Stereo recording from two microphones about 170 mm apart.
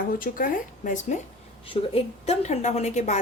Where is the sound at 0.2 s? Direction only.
55° left (ahead or behind).